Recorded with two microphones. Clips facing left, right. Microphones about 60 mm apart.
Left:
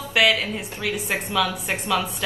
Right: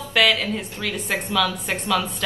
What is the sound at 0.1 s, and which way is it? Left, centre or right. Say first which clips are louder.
A woman's voice: even; centre.